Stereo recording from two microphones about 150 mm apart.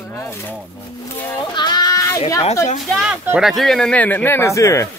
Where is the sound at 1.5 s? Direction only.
30° left (ahead or behind).